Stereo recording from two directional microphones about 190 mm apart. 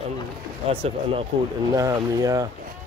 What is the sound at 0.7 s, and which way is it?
Speech, 30° right (ahead or behind).